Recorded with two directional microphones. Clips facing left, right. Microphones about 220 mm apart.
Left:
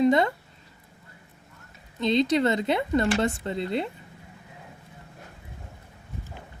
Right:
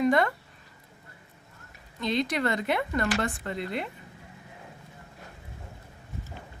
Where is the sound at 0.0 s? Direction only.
25° left (ahead or behind).